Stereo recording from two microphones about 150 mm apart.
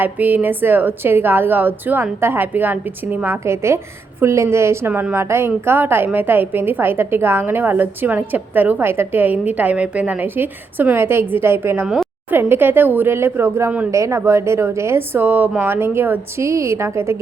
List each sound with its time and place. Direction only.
0.0 s a woman's voice: 10° right (ahead or behind)